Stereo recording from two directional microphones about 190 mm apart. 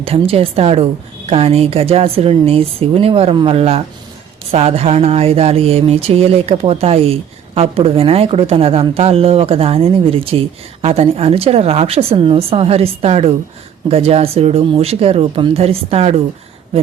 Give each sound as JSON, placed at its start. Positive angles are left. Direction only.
{"t": 0.0, "sound": "speech", "side_deg": -30}